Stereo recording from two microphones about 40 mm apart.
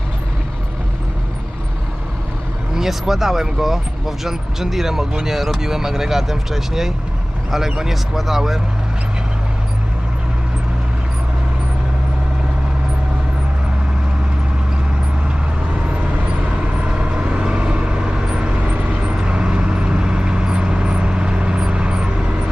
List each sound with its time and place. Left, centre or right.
2.7 s speech: centre
16.5 s vehicle: right
18.6 s vehicle: right